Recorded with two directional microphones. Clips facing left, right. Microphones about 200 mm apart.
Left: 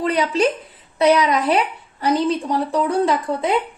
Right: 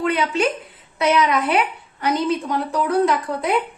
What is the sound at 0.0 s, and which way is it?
A woman's voice, 35° left (ahead or behind).